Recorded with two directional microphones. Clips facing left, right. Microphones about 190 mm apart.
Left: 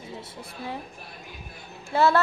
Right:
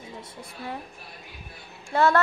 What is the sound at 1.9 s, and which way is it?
Speech, 5° left (ahead or behind).